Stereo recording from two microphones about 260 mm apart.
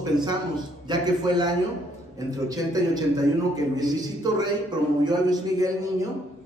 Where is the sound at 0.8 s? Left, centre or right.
Centre.